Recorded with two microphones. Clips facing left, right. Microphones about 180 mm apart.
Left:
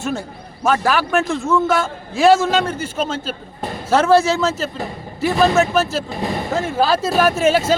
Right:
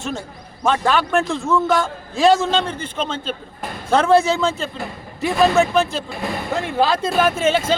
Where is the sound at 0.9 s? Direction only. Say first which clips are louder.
Even; centre (ahead or behind).